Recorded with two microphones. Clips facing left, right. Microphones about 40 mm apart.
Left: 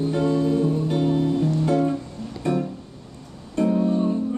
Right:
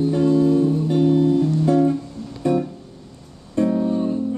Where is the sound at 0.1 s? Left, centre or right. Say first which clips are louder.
Right 5 dB; centre.